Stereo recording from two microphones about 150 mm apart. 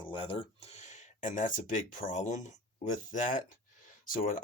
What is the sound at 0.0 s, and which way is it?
Speech, 35° left (ahead or behind).